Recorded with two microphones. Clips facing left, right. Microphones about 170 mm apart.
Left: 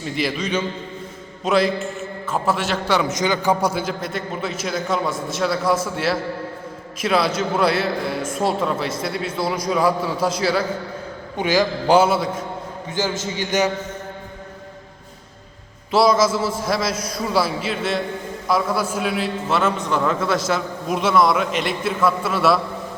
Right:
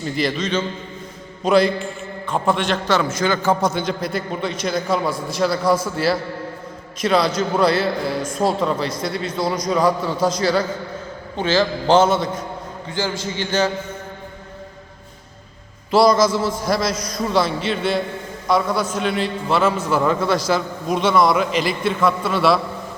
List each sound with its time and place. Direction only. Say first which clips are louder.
0.0 s a man's voice: right 2 dB; 5° left (ahead or behind)
7.0 s a man's voice: right 2 dB; 5° left (ahead or behind)
12.9 s a man's voice: even; 20° left (ahead or behind)
15.9 s a man's voice: right 2 dB; centre (ahead or behind)